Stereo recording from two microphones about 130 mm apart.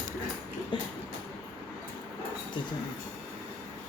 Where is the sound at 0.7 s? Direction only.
40° left (ahead or behind).